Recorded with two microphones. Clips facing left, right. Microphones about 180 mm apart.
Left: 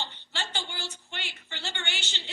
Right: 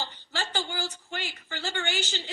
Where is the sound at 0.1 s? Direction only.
40° right (ahead or behind).